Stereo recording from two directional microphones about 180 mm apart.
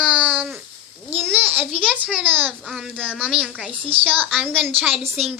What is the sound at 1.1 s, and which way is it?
Babbling, 10° right (ahead or behind).